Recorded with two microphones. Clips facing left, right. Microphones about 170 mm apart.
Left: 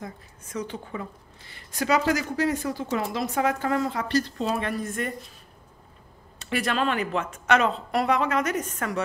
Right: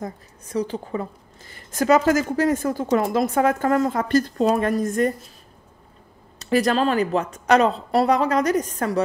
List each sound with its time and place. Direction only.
0.0 s a woman's voice: 35° right (ahead or behind)
6.4 s speech: 40° right (ahead or behind)